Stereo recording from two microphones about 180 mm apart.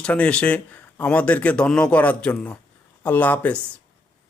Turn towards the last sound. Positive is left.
turn(degrees=10)  # may be behind; listen again after turning